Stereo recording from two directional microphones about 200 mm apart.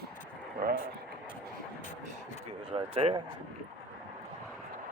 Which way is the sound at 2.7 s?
25° right (ahead or behind).